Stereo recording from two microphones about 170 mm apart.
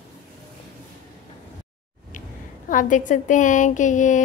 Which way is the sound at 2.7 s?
50° left (ahead or behind).